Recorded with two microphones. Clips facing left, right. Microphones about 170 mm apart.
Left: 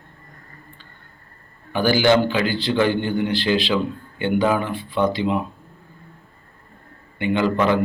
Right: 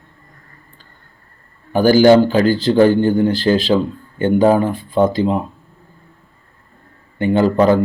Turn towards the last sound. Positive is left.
turn(degrees=-40)  # may be behind; listen again after turning